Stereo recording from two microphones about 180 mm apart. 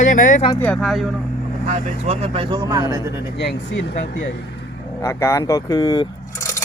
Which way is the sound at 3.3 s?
70° left (ahead or behind).